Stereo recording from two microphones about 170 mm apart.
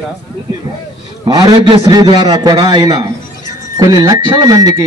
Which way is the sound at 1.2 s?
30° right (ahead or behind).